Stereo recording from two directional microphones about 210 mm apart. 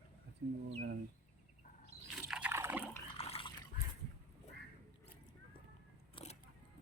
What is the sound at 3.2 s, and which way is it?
Liquid, 25° left (ahead or behind).